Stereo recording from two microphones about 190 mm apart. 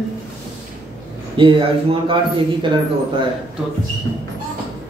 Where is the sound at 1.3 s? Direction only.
25° right (ahead or behind).